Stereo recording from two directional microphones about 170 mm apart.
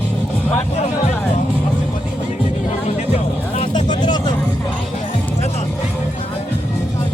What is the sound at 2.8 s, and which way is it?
Music, 40° left (ahead or behind).